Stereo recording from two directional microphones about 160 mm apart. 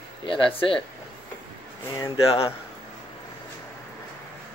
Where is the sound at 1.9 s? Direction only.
20° left (ahead or behind).